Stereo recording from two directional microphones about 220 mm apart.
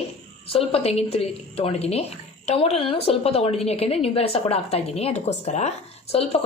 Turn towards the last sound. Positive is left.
turn(degrees=30)  # may be behind; listen again after turning